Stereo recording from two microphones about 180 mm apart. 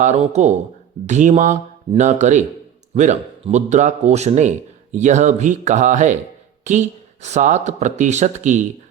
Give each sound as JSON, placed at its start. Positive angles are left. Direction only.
{"t": 0.0, "sound": "a man's voice", "side_deg": -40}